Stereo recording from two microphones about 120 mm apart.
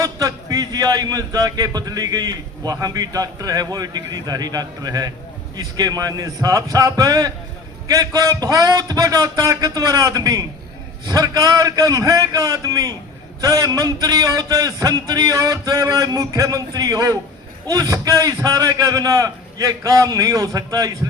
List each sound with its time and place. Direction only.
0.0 s a man's voice: 30° right (ahead or behind)